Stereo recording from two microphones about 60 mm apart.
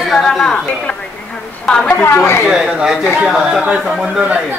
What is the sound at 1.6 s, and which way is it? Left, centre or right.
Speech, centre.